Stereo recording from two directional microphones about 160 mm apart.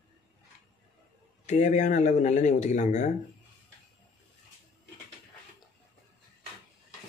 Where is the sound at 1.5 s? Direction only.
50° left (ahead or behind).